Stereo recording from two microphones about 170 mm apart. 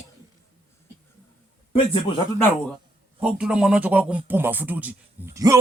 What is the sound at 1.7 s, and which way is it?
Speech, 30° left (ahead or behind).